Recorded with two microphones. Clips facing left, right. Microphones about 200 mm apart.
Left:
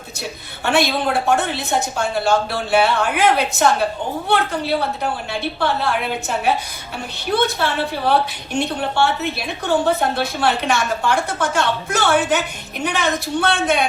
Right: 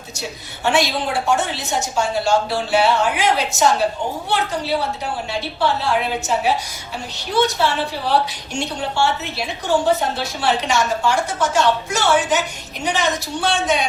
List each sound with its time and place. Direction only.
0.2 s a woman's voice: 60° left (ahead or behind)
5.3 s a woman's voice: 60° left (ahead or behind)